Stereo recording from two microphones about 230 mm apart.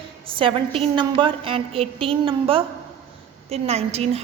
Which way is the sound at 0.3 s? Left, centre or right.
Right.